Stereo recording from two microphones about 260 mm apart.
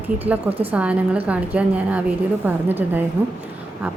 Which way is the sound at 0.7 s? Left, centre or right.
Centre.